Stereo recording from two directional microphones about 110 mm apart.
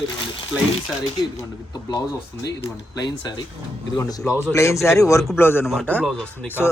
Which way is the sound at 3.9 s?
25° left (ahead or behind).